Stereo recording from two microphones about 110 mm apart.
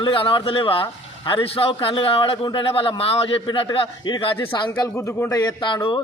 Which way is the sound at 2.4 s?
50° left (ahead or behind).